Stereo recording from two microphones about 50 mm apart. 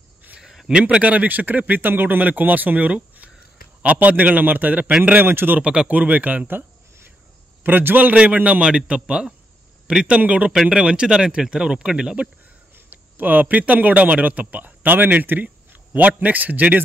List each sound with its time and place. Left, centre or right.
0.4 s a sound: centre
0.8 s speech: right
5.2 s a man's voice: right
5.6 s a man's voice: centre
5.9 s speech: right
7.6 s a man's voice: right; by 12.2 s centre
12.7 s a man's voice: right